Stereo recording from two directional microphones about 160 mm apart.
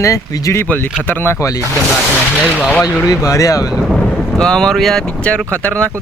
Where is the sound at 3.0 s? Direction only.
20° left (ahead or behind).